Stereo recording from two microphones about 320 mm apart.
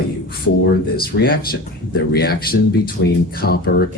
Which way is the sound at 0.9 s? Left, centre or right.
Left.